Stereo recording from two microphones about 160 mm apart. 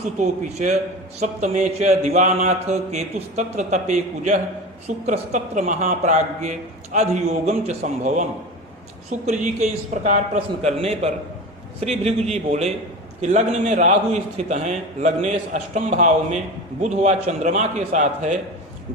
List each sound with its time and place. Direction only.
0.2 s a man's voice: 45° right (ahead or behind)